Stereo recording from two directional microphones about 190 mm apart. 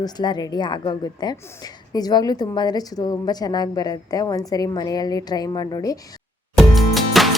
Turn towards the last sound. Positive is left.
turn(degrees=0)  # may be behind; listen again after turning